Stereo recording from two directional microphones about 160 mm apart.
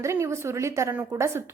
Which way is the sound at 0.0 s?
15° right (ahead or behind).